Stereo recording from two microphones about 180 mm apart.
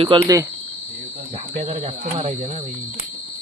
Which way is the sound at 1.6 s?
35° right (ahead or behind).